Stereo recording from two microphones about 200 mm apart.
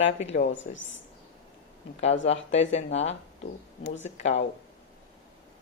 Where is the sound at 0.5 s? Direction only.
70° left (ahead or behind).